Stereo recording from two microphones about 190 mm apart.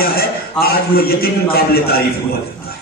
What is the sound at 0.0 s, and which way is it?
A man's voice, 50° left (ahead or behind).